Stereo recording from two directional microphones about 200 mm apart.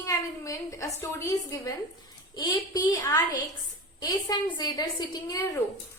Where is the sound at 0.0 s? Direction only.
15° left (ahead or behind).